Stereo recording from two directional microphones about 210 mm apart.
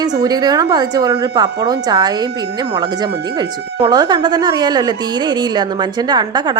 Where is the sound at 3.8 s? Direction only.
20° right (ahead or behind).